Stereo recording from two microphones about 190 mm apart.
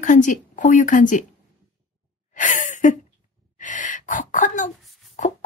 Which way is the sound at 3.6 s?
40° left (ahead or behind).